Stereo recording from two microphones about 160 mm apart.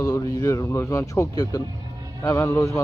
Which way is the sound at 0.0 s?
20° left (ahead or behind).